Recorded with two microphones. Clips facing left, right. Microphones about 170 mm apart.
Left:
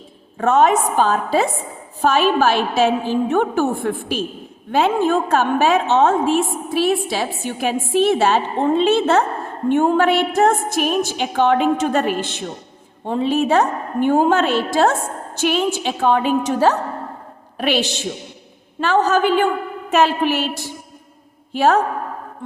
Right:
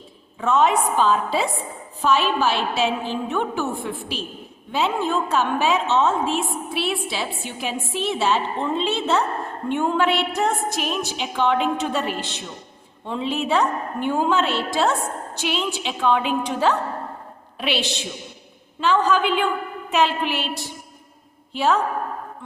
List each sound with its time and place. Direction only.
0.3 s a woman's voice: 50° left (ahead or behind)